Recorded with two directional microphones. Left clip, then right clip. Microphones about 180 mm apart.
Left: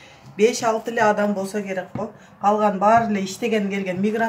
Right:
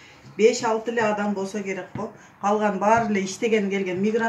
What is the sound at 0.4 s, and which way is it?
Speech, 40° left (ahead or behind).